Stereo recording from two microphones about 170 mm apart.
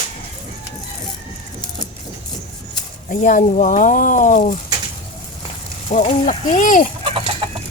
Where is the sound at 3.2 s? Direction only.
50° left (ahead or behind).